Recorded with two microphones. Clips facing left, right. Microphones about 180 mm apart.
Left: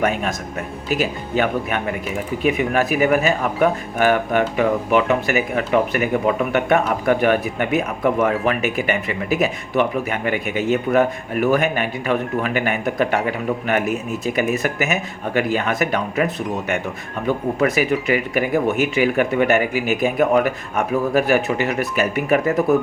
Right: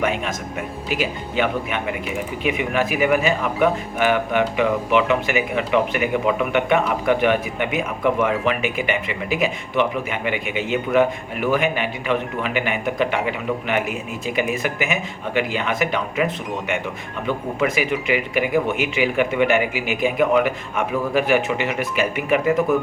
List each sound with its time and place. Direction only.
0.0 s speech: 40° left (ahead or behind)